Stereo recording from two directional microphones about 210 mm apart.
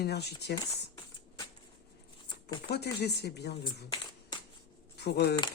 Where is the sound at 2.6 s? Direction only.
50° left (ahead or behind).